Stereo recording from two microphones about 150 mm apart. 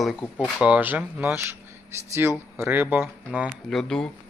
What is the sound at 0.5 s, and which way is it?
Speech, 10° right (ahead or behind).